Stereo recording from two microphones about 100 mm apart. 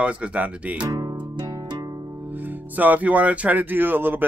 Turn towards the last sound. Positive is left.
turn(degrees=-20)  # may be behind; listen again after turning